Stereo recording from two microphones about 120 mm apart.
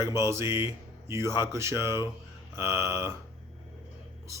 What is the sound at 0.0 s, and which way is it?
Speech, 25° right (ahead or behind).